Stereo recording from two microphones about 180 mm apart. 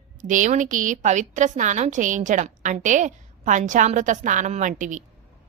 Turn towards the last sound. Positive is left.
turn(degrees=-45)  # may be behind; listen again after turning